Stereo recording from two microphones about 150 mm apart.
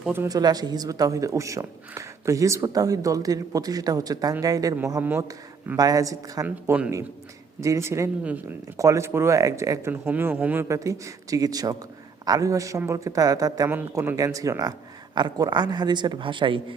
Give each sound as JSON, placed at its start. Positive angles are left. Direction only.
{"t": 0.3, "sound": "speech", "side_deg": -25}
{"t": 13.7, "sound": "speech", "side_deg": -15}